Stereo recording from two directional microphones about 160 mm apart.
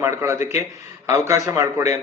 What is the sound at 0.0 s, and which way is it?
A man's voice, 15° right (ahead or behind).